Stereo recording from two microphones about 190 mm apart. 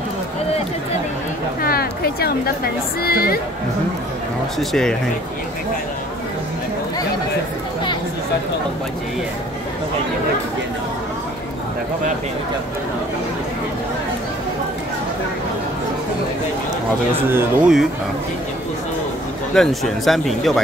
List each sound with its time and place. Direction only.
1.6 s speech: 50° left (ahead or behind)
4.6 s speech: 5° left (ahead or behind)
17.1 s speech: 10° right (ahead or behind)
19.5 s speech: centre (ahead or behind)